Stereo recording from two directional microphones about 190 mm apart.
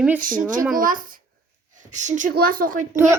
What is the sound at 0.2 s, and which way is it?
A woman's voice, 45° right (ahead or behind).